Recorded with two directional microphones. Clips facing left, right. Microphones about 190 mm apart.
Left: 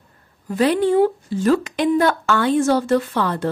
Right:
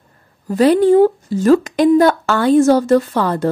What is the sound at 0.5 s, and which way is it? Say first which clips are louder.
Speech: right 6 dB; 40° right (ahead or behind).